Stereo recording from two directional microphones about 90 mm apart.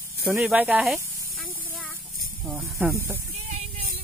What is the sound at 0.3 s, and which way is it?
Speech, 10° right (ahead or behind).